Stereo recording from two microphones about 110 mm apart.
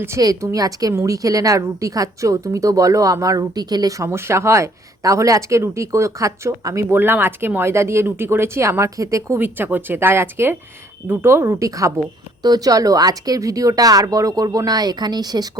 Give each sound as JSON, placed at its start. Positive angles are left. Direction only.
{"t": 0.2, "sound": "a woman's voice", "side_deg": -35}